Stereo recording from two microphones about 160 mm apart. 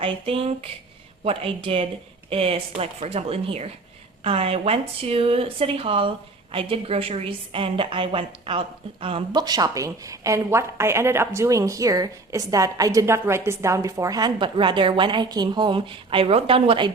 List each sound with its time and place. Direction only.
0.0 s a woman's voice: 35° right (ahead or behind)